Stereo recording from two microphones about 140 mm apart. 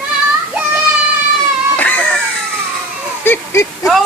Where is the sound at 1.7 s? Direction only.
10° left (ahead or behind).